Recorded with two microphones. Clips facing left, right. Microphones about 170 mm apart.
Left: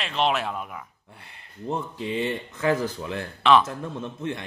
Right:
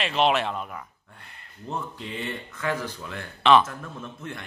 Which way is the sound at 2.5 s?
30° left (ahead or behind).